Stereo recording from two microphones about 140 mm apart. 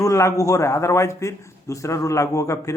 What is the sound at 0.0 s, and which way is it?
A man's voice, 20° left (ahead or behind).